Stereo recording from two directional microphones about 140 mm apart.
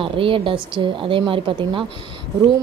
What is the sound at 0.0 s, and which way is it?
Speech, 40° right (ahead or behind).